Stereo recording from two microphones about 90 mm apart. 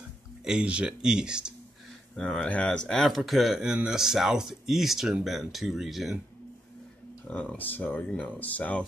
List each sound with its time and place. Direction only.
0.5 s speech: 10° right (ahead or behind)
2.1 s speech: 10° left (ahead or behind)
7.2 s speech: 15° left (ahead or behind)